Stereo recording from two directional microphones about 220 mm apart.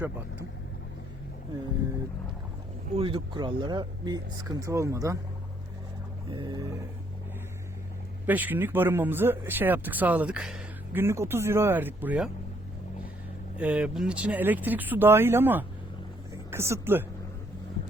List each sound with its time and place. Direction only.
2.9 s speech: 25° right (ahead or behind)
6.3 s speech: 20° right (ahead or behind)
8.3 s speech: 10° right (ahead or behind)
13.6 s speech: 5° right (ahead or behind)